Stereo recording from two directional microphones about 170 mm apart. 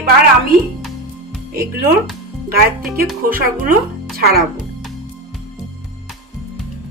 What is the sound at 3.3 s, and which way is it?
Speech, 60° right (ahead or behind).